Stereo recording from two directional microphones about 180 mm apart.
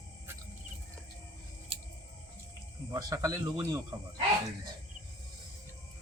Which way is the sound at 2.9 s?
20° right (ahead or behind).